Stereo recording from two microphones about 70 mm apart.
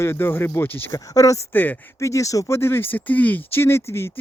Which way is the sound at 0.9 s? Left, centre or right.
Left.